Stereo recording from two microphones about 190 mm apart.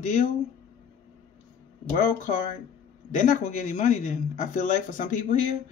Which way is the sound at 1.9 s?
40° left (ahead or behind).